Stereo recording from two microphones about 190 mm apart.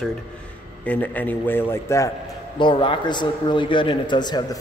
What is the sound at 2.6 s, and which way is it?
Speech, 25° left (ahead or behind).